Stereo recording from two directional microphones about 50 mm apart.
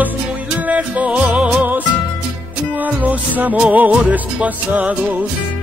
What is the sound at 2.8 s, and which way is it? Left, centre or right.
Music, right.